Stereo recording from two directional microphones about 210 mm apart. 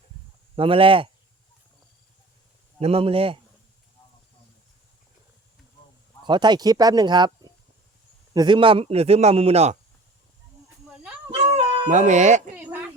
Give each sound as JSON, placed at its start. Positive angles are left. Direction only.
{"t": 0.5, "sound": "a man's voice", "side_deg": -25}
{"t": 2.8, "sound": "a man's voice", "side_deg": -25}
{"t": 6.2, "sound": "a man's voice", "side_deg": -20}
{"t": 11.3, "sound": "cat", "side_deg": -25}